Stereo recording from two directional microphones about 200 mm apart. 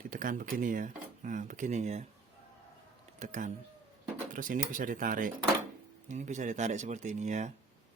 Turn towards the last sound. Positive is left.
turn(degrees=-35)  # may be behind; listen again after turning